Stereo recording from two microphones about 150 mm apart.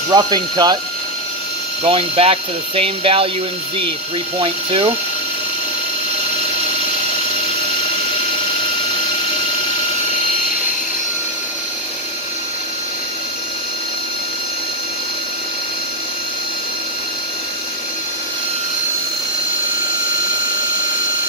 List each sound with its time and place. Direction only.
0.1 s speech: 25° right (ahead or behind)
1.8 s speech: 40° right (ahead or behind)
4.4 s speech: 40° right (ahead or behind)